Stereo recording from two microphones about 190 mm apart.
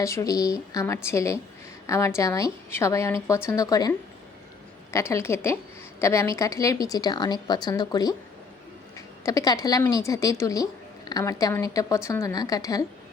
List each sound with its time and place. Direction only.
0.0 s a woman's voice: 15° left (ahead or behind)